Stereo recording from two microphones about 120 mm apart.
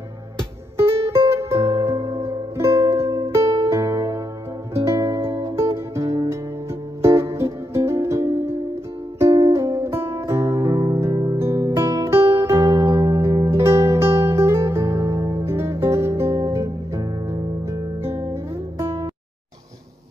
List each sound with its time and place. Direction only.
0.7 s music: 20° right (ahead or behind)